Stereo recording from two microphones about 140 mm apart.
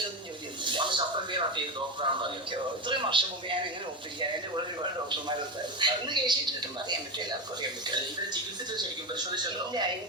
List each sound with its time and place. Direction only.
0.6 s television: 35° right (ahead or behind)
2.0 s speech: 35° right (ahead or behind)
5.8 s speech: 35° right (ahead or behind)
7.9 s speech: 30° right (ahead or behind)